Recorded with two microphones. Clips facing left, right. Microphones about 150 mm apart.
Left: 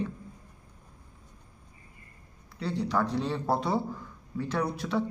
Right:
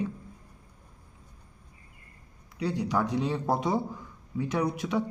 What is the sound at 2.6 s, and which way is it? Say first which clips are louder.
Speech: right 1 dB; 15° right (ahead or behind).